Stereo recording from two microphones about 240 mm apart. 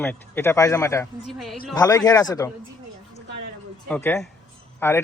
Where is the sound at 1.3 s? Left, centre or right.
Centre.